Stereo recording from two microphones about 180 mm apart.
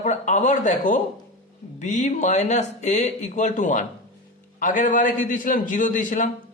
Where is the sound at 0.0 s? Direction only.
40° left (ahead or behind).